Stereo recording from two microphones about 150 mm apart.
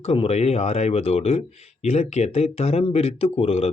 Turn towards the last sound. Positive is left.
turn(degrees=40)  # may be behind; listen again after turning